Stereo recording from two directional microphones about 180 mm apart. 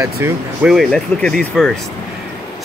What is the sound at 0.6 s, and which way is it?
Speech, centre (ahead or behind).